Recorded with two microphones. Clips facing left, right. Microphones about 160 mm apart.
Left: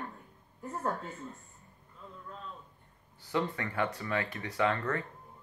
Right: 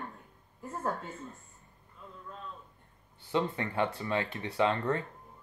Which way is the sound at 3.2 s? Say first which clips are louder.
Right 2 dB; 25° right (ahead or behind).